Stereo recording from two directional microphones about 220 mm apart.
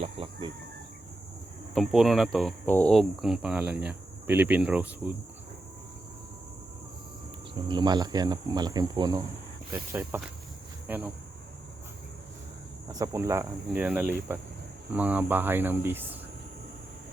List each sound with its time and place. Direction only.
0.0 s a sound: 25° right (ahead or behind)
1.7 s speech: centre (ahead or behind)
7.5 s cricket: 20° right (ahead or behind)
9.9 s speech: 5° right (ahead or behind)
12.9 s speech: 15° right (ahead or behind)